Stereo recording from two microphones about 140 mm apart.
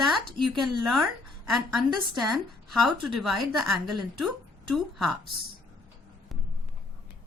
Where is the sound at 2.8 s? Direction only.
Centre (ahead or behind).